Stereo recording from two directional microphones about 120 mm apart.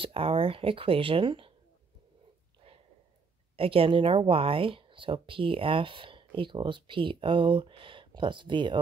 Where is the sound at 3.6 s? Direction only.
50° right (ahead or behind).